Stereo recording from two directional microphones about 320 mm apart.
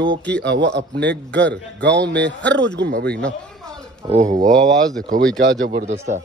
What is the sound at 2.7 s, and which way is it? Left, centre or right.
A man's voice, right.